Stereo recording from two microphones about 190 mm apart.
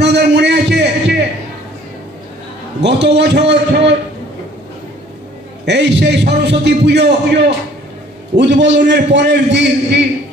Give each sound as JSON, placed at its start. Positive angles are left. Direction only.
{"t": 0.0, "sound": "a sound", "side_deg": -65}
{"t": 2.8, "sound": "a man's voice", "side_deg": -65}
{"t": 5.7, "sound": "a man's voice", "side_deg": -65}